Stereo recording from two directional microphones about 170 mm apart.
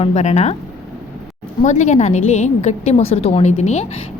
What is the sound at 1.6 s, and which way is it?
A woman's voice, 45° left (ahead or behind).